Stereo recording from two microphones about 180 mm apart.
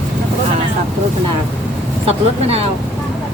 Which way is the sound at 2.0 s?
35° right (ahead or behind).